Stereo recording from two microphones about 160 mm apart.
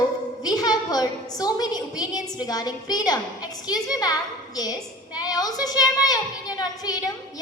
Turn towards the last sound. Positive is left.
turn(degrees=25)  # may be behind; listen again after turning